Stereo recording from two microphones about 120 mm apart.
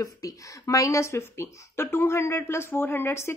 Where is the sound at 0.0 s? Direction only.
30° left (ahead or behind).